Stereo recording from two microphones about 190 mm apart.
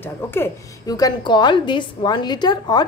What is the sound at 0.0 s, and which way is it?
A woman's voice, 10° left (ahead or behind).